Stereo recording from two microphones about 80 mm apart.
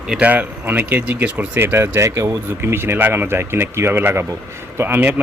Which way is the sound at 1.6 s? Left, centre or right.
Right.